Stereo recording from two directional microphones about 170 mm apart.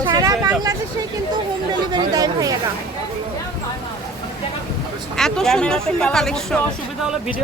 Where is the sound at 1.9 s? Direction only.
20° right (ahead or behind).